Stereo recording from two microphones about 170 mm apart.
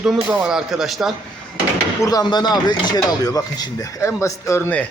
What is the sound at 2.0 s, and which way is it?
Speech, 25° left (ahead or behind).